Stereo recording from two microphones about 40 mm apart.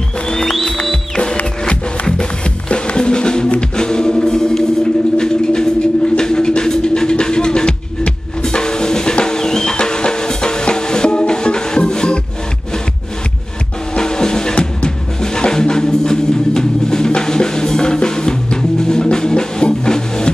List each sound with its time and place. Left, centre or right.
0.5 s music: centre
1.7 s music: left
5.1 s a sound: centre
9.1 s music: centre
13.9 s music: centre